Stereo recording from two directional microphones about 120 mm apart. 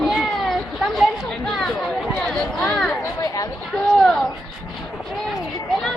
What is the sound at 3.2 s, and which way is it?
Speech, 30° left (ahead or behind).